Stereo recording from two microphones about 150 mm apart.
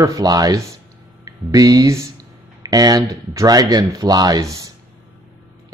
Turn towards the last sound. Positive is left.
turn(degrees=-20)  # may be behind; listen again after turning